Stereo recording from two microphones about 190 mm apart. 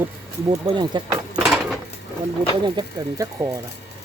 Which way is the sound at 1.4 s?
Centre (ahead or behind).